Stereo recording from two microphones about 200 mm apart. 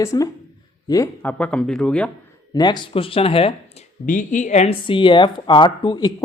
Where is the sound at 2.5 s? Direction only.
20° left (ahead or behind).